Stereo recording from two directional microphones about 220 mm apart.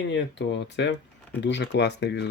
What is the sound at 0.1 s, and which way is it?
Speech, 50° left (ahead or behind).